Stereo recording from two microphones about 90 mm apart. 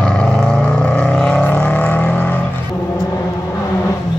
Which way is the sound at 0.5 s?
10° left (ahead or behind).